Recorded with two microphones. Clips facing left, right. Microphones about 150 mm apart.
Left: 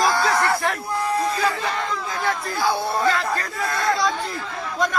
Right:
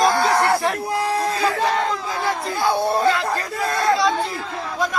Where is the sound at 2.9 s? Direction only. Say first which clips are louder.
Right 3 dB; 30° right (ahead or behind).